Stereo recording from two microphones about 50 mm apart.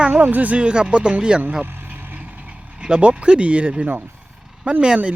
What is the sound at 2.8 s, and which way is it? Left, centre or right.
Speech, centre.